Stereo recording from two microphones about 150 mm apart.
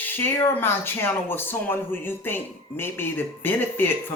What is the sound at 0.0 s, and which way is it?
Speech, 15° left (ahead or behind).